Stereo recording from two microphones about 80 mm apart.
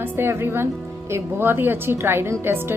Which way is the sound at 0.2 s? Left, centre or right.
Right.